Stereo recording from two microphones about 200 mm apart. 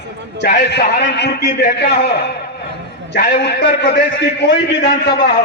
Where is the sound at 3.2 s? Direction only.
55° left (ahead or behind).